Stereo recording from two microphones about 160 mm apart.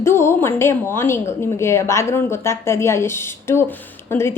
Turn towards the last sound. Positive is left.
turn(degrees=15)  # may be behind; listen again after turning